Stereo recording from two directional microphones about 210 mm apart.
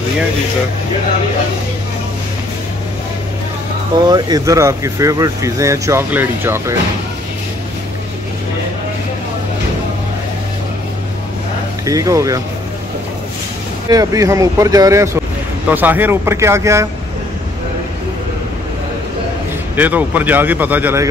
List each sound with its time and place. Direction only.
4.0 s speech: 20° right (ahead or behind)
11.8 s speech: 15° right (ahead or behind)
13.8 s speech: 15° right (ahead or behind)
19.7 s speech: 10° right (ahead or behind)